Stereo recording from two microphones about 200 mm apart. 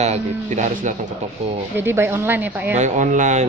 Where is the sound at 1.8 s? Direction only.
10° right (ahead or behind).